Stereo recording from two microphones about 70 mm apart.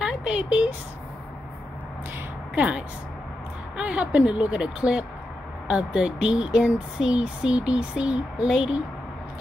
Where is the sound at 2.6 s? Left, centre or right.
Centre.